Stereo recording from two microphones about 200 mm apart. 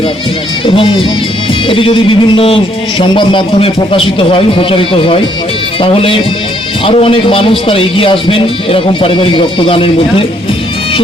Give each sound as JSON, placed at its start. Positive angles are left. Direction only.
{"t": 0.6, "sound": "a man's voice", "side_deg": 25}